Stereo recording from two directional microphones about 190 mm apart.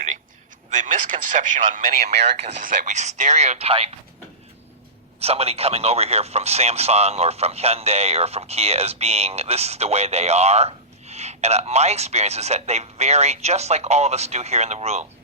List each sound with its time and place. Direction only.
0.7 s speech: 40° right (ahead or behind)
5.2 s speech: 30° right (ahead or behind)